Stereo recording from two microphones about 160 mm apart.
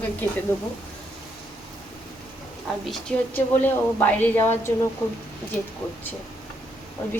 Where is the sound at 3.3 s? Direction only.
10° left (ahead or behind).